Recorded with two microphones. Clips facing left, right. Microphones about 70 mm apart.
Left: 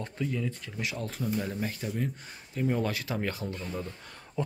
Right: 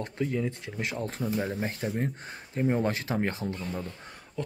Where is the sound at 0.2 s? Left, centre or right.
Right.